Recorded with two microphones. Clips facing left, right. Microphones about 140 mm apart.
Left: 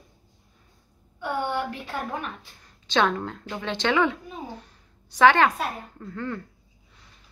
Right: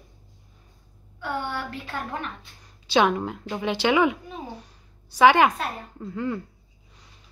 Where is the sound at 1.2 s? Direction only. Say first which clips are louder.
Left 3 dB; 15° left (ahead or behind).